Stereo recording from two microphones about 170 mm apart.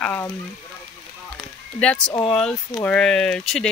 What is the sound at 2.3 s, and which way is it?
Speech, 5° left (ahead or behind).